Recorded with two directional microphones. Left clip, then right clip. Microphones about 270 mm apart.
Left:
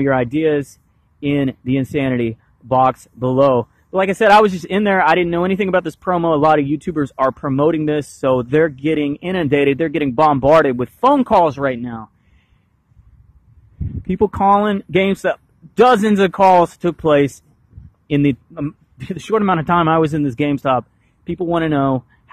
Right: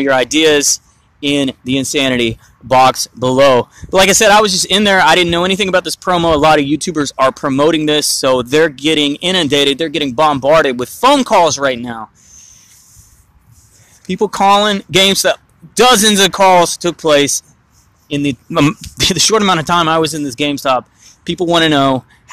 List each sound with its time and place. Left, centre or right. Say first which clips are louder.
0.0 s speech: right 5 dB; centre
4.2 s speech: right 2 dB; centre
14.0 s speech: right 3 dB; centre
18.5 s speech: right 14 dB; right
19.1 s speech: right 4 dB; centre